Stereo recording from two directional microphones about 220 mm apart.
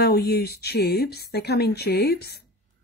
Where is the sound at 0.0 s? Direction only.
45° left (ahead or behind).